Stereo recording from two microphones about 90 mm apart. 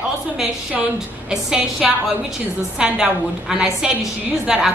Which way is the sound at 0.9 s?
5° right (ahead or behind).